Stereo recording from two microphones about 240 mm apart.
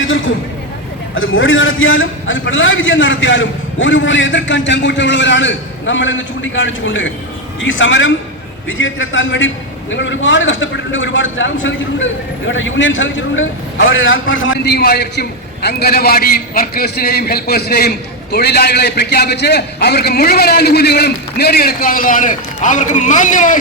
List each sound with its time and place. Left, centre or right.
1.1 s a man's voice: left